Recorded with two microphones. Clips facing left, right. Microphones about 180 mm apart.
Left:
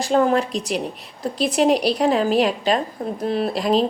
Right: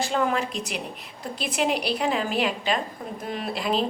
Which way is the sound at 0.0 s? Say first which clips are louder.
Left 7 dB; 40° left (ahead or behind).